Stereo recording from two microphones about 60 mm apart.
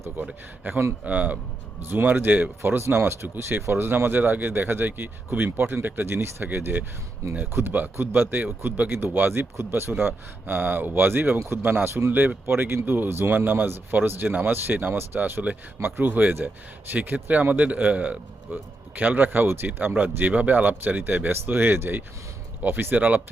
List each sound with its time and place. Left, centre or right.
0.7 s a man's voice: right
1.9 s a man's voice: right
20.0 s a man's voice: right